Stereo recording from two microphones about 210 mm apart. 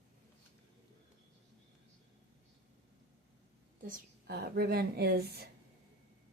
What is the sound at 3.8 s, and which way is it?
A woman's voice, 45° right (ahead or behind).